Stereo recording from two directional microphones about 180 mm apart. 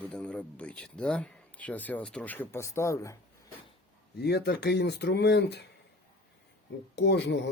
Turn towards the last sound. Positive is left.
turn(degrees=75)  # may be behind; listen again after turning